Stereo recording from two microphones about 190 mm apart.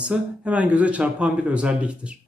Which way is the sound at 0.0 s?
5° right (ahead or behind).